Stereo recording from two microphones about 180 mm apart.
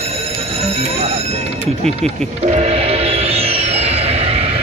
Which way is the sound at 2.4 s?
35° right (ahead or behind).